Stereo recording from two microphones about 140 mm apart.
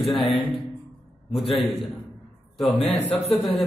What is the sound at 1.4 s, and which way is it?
Speech, 40° left (ahead or behind).